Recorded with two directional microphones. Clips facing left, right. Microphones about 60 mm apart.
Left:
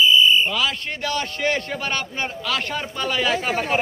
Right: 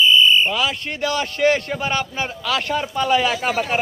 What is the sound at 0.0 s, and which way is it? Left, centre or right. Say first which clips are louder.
Fire alarm: right 1 dB; right.